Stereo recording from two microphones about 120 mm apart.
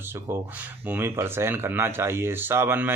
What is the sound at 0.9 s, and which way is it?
Speech, 20° right (ahead or behind).